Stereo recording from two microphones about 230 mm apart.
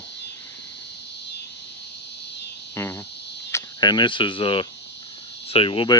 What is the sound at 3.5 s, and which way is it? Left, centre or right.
Speech, centre.